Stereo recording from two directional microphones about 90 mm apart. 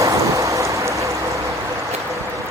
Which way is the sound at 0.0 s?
35° right (ahead or behind).